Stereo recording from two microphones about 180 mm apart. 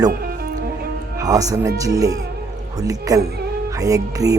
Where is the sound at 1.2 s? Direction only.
20° right (ahead or behind).